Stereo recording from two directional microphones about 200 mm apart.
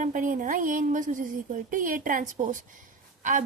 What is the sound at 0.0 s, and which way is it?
Speech, 40° right (ahead or behind).